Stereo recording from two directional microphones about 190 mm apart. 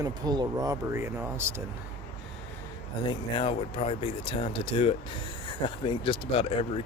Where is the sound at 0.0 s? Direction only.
20° right (ahead or behind).